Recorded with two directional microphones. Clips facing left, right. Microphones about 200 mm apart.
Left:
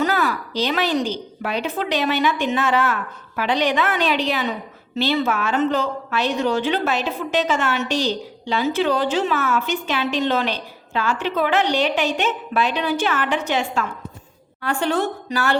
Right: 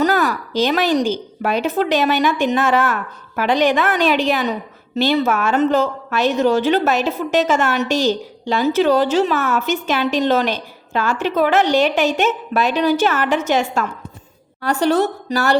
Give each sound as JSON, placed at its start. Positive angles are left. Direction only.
{"t": 0.0, "sound": "a woman's voice", "side_deg": -40}